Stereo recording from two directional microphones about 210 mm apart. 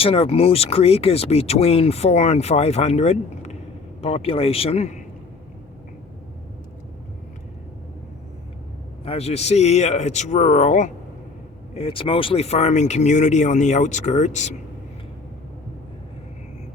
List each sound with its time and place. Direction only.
0.0 s speech: 30° left (ahead or behind)
9.0 s speech: 30° left (ahead or behind)